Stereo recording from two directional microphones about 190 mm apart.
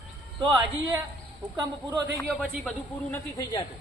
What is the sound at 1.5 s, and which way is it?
Speech, 20° right (ahead or behind).